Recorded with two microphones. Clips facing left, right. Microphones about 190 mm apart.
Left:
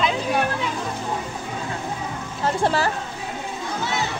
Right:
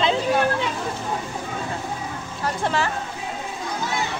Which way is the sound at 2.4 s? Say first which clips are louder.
Left 3 dB; 35° left (ahead or behind).